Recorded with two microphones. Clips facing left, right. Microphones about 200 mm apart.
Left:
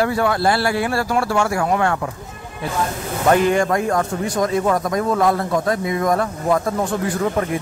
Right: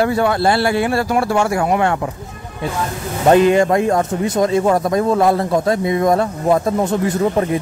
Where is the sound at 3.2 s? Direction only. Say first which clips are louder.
Right 4 dB; 20° right (ahead or behind).